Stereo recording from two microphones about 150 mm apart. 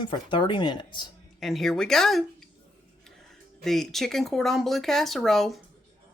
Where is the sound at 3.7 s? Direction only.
Centre (ahead or behind).